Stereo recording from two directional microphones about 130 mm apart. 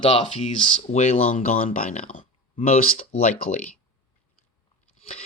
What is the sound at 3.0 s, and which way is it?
Speech, 50° left (ahead or behind).